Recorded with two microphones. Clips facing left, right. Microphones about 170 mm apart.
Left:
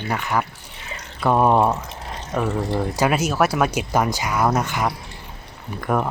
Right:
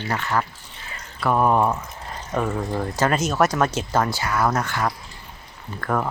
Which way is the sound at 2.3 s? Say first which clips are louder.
Left 2 dB; 5° left (ahead or behind).